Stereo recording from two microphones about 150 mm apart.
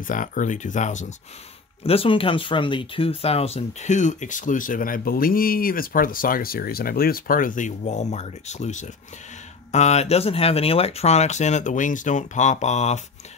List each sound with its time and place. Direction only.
0.0 s speech: 65° left (ahead or behind)
1.8 s speech: 40° left (ahead or behind)